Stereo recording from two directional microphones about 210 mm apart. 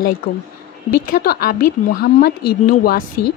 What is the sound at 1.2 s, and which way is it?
Speech, 45° left (ahead or behind).